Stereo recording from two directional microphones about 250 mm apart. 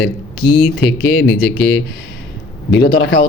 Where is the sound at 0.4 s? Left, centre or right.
Centre.